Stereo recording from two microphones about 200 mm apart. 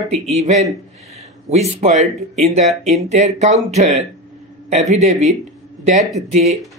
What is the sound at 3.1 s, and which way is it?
Speech, 35° right (ahead or behind).